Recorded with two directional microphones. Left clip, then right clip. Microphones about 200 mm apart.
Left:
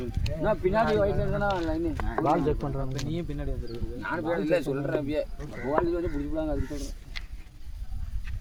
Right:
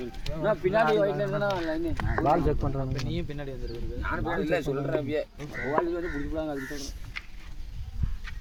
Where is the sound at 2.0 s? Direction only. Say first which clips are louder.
Right 1 dB; 40° right (ahead or behind).